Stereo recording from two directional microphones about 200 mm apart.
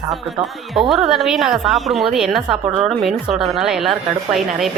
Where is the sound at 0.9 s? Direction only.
Centre (ahead or behind).